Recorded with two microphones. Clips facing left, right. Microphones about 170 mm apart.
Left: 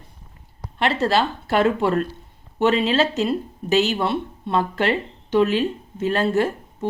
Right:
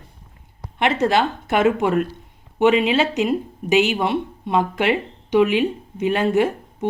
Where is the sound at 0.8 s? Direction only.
15° right (ahead or behind).